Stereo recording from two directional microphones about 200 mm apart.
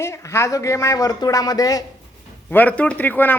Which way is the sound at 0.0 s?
15° left (ahead or behind).